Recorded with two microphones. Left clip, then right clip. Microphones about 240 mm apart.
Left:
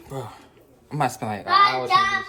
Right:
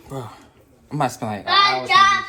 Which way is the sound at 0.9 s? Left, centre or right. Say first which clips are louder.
Right 2 dB; centre.